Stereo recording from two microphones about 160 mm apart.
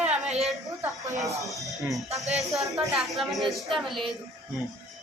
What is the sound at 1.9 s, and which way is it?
A woman's voice, centre (ahead or behind).